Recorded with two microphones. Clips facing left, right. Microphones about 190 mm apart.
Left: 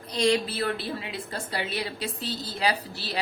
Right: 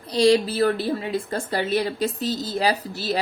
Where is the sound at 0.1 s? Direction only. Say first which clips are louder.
Right 7 dB; 35° right (ahead or behind).